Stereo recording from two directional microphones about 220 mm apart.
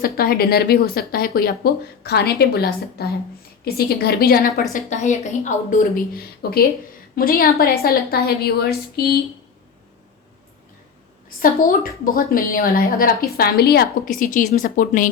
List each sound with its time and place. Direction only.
0.0 s speech: 45° left (ahead or behind)
4.7 s a woman's voice: 35° left (ahead or behind)
11.3 s a woman's voice: 40° left (ahead or behind)